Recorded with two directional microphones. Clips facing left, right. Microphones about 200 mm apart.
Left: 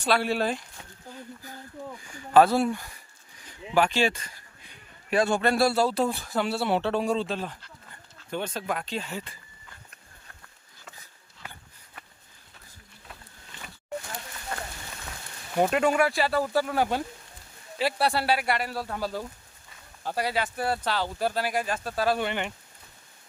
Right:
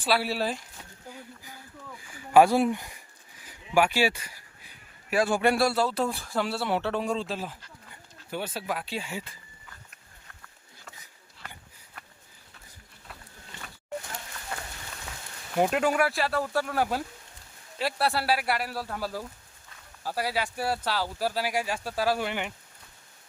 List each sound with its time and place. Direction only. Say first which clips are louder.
0.0 s speech: left 2 dB; 5° right (ahead or behind)
1.1 s a sound: left 7 dB; 10° right (ahead or behind)
2.1 s speech: even; 10° right (ahead or behind)
3.4 s a sound: even; 10° right (ahead or behind)
5.1 s speech: even; 5° right (ahead or behind)
6.5 s speech: left 5 dB; 20° left (ahead or behind)
7.1 s speech: left 3 dB; centre (ahead or behind)
14.5 s rain on surface: left 2 dB; 5° right (ahead or behind)
15.5 s speech: left 1 dB; centre (ahead or behind)